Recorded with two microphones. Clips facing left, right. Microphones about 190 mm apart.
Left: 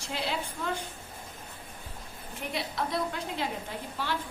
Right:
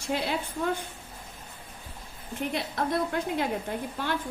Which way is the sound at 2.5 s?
55° right (ahead or behind).